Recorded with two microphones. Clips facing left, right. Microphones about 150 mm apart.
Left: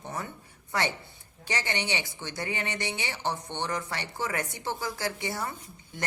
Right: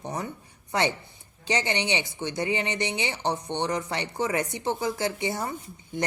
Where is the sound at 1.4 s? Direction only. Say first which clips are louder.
Right 5 dB; 20° right (ahead or behind).